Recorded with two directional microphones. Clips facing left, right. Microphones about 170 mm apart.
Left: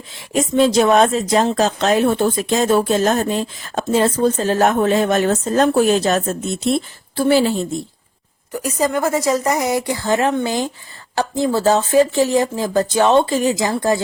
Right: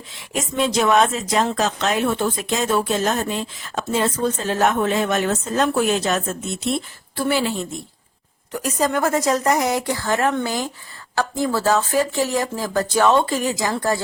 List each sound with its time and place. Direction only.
0.3 s speech: 35° left (ahead or behind)
8.5 s a woman's voice: 5° left (ahead or behind); by 14.0 s 20° left (ahead or behind)